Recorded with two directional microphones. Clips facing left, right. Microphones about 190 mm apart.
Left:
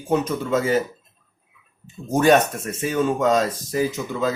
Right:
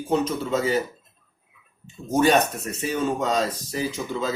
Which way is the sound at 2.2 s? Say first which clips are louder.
Left 3 dB; 50° left (ahead or behind).